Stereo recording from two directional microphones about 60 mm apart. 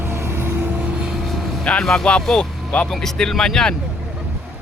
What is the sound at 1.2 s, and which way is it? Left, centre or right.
Vehicle, centre.